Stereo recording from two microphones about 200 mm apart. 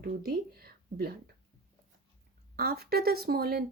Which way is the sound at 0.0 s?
50° right (ahead or behind).